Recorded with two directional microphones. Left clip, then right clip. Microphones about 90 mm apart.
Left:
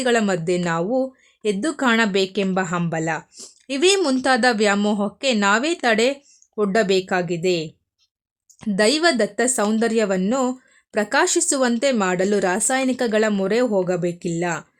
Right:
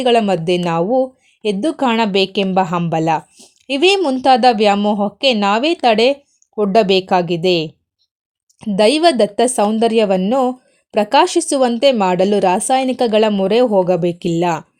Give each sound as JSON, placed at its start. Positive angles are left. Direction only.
{"t": 0.0, "sound": "speech", "side_deg": -25}
{"t": 3.7, "sound": "speech", "side_deg": -25}
{"t": 4.8, "sound": "speech", "side_deg": -10}
{"t": 5.4, "sound": "speech", "side_deg": -25}
{"t": 8.7, "sound": "speech", "side_deg": -25}